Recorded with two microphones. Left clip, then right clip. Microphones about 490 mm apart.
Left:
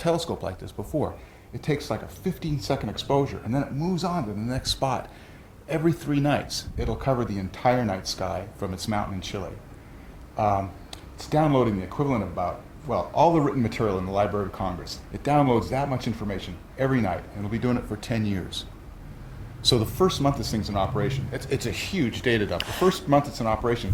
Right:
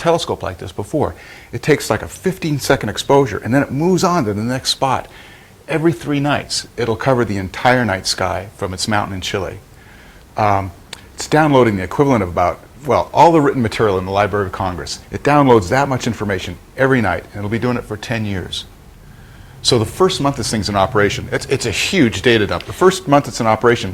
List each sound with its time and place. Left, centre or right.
0.0 s speech: right
3.8 s speech: right
4.4 s speech: right
19.6 s speech: right